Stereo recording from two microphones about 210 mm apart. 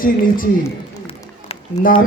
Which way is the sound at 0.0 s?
40° left (ahead or behind).